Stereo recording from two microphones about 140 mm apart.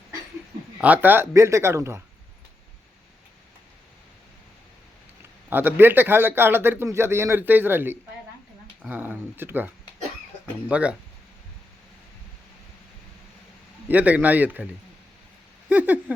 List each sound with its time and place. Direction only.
0.8 s speech: 10° right (ahead or behind)
5.5 s a man's voice: 15° right (ahead or behind)
13.8 s a man's voice: 10° right (ahead or behind)
15.7 s a man's voice: 10° right (ahead or behind)